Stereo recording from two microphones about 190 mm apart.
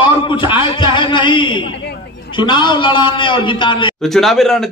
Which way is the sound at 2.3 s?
25° left (ahead or behind).